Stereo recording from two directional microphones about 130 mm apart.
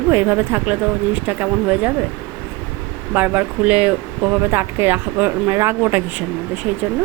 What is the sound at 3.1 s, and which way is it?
Speech, 15° right (ahead or behind).